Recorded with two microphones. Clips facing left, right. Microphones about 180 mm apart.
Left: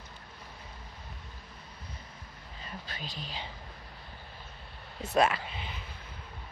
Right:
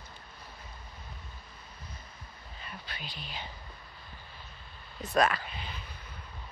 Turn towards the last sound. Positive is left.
turn(degrees=20)  # may be behind; listen again after turning